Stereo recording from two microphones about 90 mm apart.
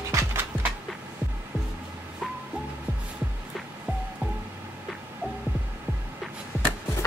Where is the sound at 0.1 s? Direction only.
30° right (ahead or behind).